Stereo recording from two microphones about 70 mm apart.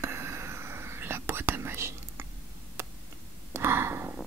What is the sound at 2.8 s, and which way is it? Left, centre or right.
Tick, right.